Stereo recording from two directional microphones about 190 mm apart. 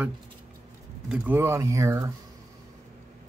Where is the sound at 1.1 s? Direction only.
10° right (ahead or behind).